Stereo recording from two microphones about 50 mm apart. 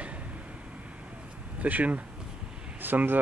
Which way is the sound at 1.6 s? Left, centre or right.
Right.